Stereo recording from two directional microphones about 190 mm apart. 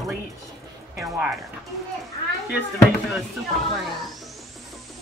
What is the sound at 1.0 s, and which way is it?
Speech, centre (ahead or behind).